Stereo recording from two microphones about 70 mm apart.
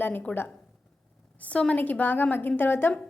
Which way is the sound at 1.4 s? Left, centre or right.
Centre.